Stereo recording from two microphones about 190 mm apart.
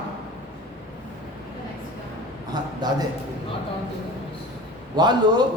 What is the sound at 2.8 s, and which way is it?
Speech, 20° right (ahead or behind).